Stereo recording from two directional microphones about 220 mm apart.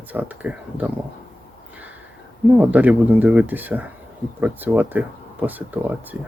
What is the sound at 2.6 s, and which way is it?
Speech, 5° right (ahead or behind).